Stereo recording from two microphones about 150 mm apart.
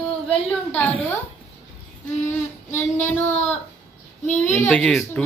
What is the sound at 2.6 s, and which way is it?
Child singing, 55° left (ahead or behind).